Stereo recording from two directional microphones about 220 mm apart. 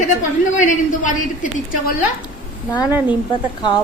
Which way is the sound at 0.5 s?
35° left (ahead or behind).